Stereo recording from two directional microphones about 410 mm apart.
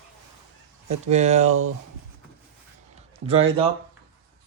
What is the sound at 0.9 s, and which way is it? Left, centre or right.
Speech, centre.